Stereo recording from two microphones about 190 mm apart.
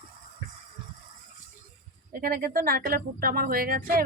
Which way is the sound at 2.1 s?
50° right (ahead or behind).